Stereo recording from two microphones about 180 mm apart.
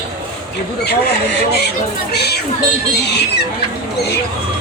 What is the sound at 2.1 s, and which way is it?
Speech, 65° left (ahead or behind).